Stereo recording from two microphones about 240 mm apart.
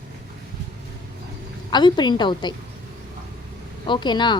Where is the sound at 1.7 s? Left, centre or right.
Centre.